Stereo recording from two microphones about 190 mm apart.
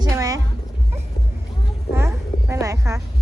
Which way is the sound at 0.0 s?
15° right (ahead or behind).